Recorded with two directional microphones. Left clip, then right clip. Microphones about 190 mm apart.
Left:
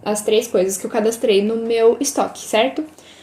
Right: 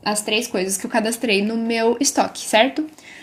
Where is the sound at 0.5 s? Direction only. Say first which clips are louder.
Left 3 dB; 45° right (ahead or behind).